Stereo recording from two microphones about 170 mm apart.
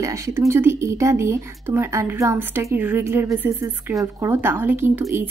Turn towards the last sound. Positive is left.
turn(degrees=-10)  # may be behind; listen again after turning